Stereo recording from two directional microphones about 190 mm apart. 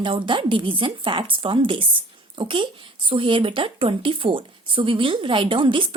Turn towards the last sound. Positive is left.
turn(degrees=-25)  # may be behind; listen again after turning